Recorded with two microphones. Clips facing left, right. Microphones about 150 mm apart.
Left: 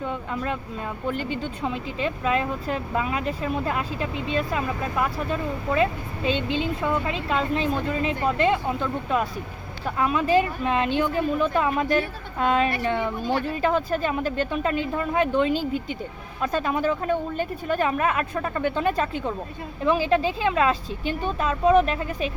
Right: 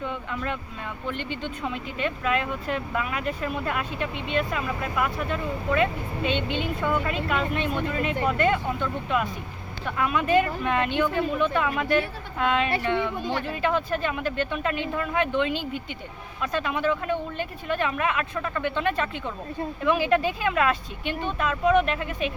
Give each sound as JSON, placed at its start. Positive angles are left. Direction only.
{"t": 1.0, "sound": "speech", "side_deg": 40}